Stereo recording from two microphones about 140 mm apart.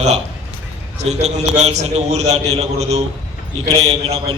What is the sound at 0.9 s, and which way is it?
A man's voice, 50° right (ahead or behind).